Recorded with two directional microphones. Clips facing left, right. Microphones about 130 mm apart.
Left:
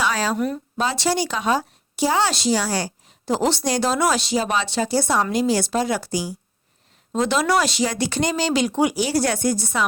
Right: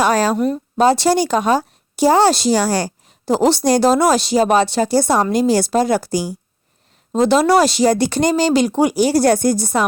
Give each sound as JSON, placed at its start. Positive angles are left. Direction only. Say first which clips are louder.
{"t": 0.0, "sound": "a sound", "louder": "right 7 dB", "side_deg": -45}
{"t": 0.3, "sound": "speech", "louder": "right 5 dB", "side_deg": -30}
{"t": 0.8, "sound": "a woman's voice", "louder": "right 9 dB", "side_deg": -40}